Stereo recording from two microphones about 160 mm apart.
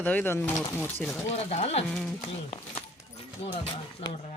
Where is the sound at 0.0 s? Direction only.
10° left (ahead or behind).